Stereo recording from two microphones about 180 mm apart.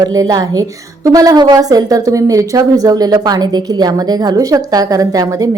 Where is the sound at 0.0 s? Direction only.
20° right (ahead or behind).